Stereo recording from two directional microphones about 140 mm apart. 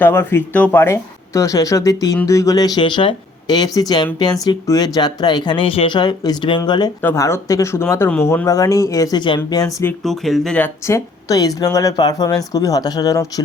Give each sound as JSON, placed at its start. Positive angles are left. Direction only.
{"t": 0.0, "sound": "speech", "side_deg": 15}
{"t": 7.0, "sound": "speech", "side_deg": 20}
{"t": 10.0, "sound": "speech", "side_deg": 0}
{"t": 10.8, "sound": "speech", "side_deg": 20}